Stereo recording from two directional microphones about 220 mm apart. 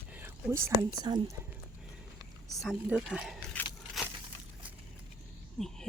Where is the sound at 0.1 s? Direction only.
10° right (ahead or behind).